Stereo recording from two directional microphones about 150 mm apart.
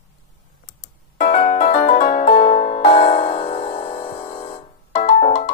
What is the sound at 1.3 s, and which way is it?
Music, 45° left (ahead or behind).